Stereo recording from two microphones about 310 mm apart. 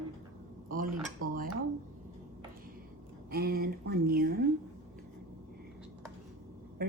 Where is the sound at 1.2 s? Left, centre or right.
Right.